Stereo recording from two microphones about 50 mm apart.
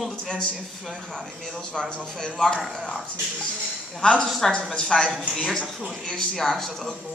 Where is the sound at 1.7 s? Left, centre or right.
Centre.